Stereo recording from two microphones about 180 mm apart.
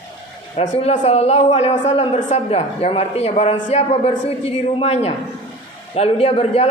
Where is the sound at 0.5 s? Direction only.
35° left (ahead or behind).